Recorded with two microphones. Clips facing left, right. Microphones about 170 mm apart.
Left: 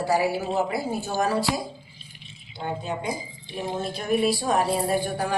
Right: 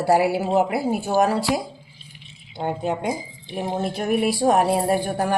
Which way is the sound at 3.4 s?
65° right (ahead or behind).